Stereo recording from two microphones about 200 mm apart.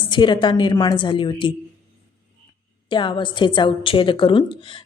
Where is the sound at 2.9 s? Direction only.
25° left (ahead or behind).